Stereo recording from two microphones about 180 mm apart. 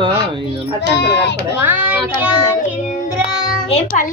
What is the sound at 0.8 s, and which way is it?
Speech, 70° left (ahead or behind).